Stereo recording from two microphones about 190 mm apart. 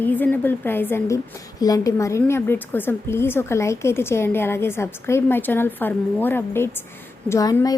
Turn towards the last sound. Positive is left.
turn(degrees=20)  # may be behind; listen again after turning